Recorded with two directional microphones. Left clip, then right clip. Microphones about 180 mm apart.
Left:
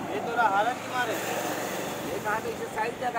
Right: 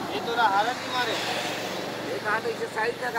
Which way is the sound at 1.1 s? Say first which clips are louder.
Right 2 dB; 50° left (ahead or behind).